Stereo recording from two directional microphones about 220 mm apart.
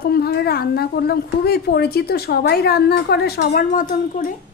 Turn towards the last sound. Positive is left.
turn(degrees=40)  # may be behind; listen again after turning